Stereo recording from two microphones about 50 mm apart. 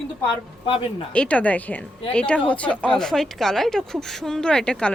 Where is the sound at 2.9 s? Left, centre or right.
Centre.